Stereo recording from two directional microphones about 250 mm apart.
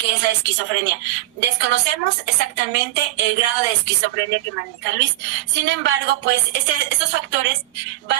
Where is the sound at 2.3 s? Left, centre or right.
Right.